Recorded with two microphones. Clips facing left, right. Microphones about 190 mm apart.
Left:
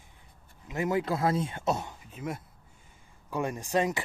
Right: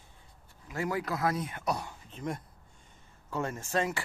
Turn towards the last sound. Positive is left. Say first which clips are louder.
# left 3 dB
turn(degrees=15)  # may be behind; listen again after turning